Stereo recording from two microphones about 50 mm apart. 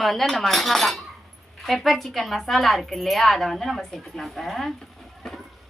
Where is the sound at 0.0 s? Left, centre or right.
Centre.